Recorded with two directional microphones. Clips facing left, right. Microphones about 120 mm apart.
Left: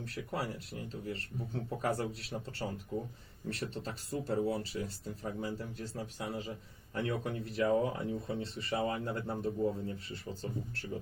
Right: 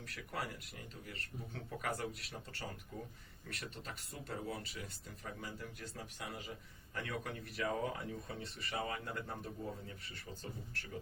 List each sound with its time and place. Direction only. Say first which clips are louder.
0.0 s speech: left 6 dB; 25° left (ahead or behind)